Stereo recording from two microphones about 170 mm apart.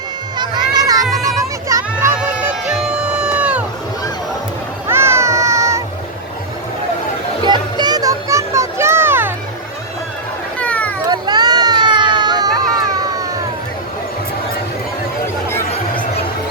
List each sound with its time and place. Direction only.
0.3 s a sound: 25° right (ahead or behind)
2.7 s music: 5° right (ahead or behind)
4.9 s music: 15° right (ahead or behind)
7.4 s a sound: 25° right (ahead or behind)
10.6 s cat: 10° left (ahead or behind)
11.0 s run: 25° right (ahead or behind)